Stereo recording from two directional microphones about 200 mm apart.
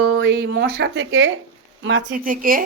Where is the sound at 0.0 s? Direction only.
60° right (ahead or behind).